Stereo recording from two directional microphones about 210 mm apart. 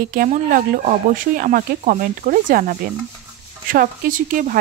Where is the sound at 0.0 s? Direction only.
40° right (ahead or behind).